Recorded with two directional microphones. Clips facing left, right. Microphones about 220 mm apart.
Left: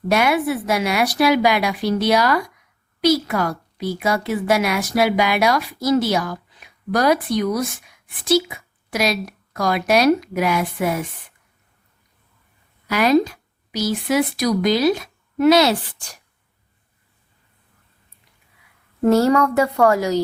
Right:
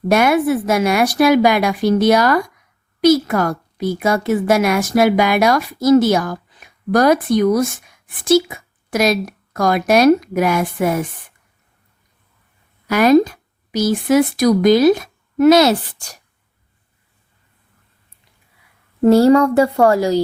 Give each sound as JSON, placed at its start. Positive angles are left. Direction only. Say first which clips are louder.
{"t": 0.1, "sound": "a woman's voice", "louder": "right 4 dB", "side_deg": -45}
{"t": 12.9, "sound": "speech", "louder": "right 5 dB", "side_deg": -50}
{"t": 19.0, "sound": "speech", "louder": "right 5 dB", "side_deg": -30}